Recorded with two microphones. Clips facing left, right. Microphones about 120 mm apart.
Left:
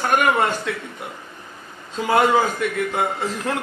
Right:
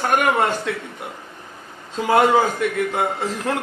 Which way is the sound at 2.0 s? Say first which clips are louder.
Right 1 dB; 40° right (ahead or behind).